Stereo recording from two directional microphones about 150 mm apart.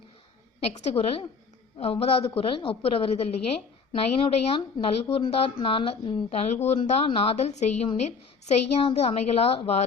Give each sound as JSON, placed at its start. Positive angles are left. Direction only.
{"t": 0.7, "sound": "a woman's voice", "side_deg": 45}